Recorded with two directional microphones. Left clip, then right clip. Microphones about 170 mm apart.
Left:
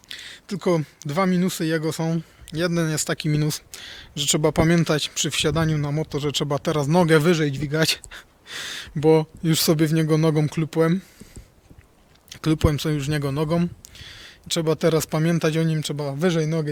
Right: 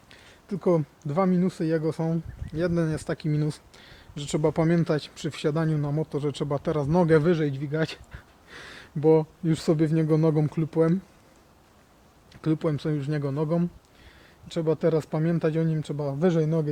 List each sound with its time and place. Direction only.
0.1 s speech: 20° left (ahead or behind)
7.3 s speech: 45° left (ahead or behind); by 10.9 s 25° left (ahead or behind)
12.3 s speech: 30° left (ahead or behind)